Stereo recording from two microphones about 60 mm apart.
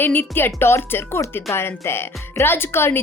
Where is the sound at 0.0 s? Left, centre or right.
Left.